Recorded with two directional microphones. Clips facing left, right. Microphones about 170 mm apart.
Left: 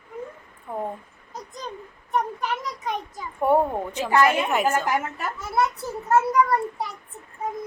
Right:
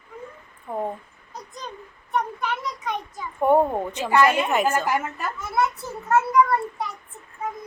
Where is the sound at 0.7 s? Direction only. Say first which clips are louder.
Right 2 dB; centre (ahead or behind).